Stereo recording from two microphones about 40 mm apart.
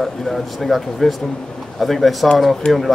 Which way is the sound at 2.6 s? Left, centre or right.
Left.